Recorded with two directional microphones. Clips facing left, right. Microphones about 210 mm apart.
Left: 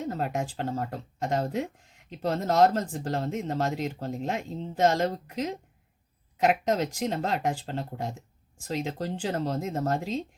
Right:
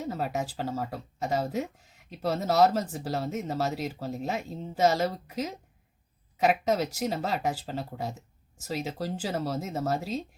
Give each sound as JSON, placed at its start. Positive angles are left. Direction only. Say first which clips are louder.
{"t": 0.0, "sound": "speech", "louder": "left 1 dB", "side_deg": -5}